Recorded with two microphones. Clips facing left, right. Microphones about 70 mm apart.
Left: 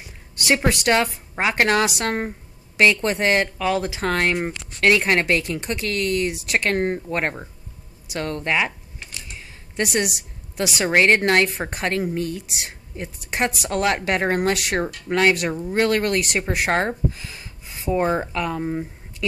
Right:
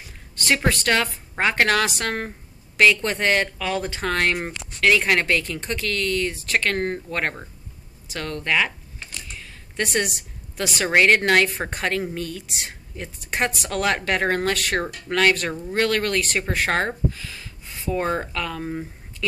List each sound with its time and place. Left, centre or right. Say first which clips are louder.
0.5 s speech: left 2 dB; centre
9.9 s a woman's voice: left 1 dB; centre
18.7 s speech: left 3 dB; centre